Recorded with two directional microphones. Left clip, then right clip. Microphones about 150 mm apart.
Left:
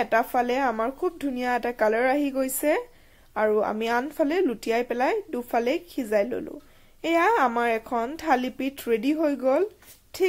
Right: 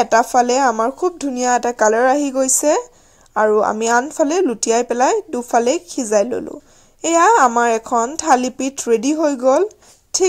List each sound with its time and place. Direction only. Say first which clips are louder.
0.0 s speech: right 9 dB; 35° right (ahead or behind)